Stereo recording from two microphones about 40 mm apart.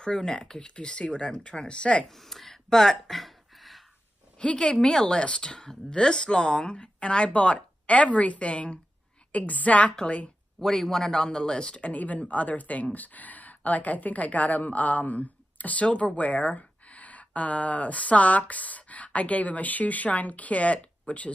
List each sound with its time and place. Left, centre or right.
0.0 s speech: centre
2.0 s a sound: centre
4.4 s a woman's voice: left
10.6 s speech: centre
11.8 s a woman's voice: left